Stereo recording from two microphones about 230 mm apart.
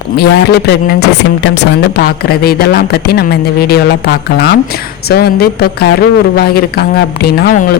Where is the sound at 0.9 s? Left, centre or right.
Left.